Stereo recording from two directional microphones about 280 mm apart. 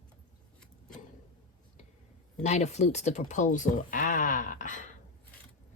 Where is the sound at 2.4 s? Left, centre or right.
Left.